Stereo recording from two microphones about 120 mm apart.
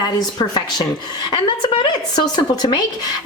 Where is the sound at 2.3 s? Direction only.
35° left (ahead or behind).